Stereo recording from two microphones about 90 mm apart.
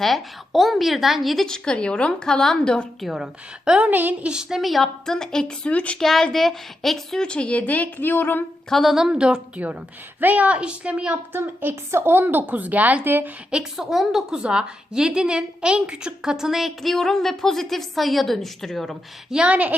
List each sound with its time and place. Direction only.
0.0 s a woman's voice: centre (ahead or behind)
3.7 s a woman's voice: 15° right (ahead or behind); by 6.0 s 15° left (ahead or behind)
6.0 s a woman's voice: 5° left (ahead or behind); by 8.4 s 20° left (ahead or behind)
8.7 s a woman's voice: centre (ahead or behind); by 13.3 s 20° right (ahead or behind)
13.5 s a woman's voice: 5° right (ahead or behind)
19.3 s a woman's voice: 10° right (ahead or behind)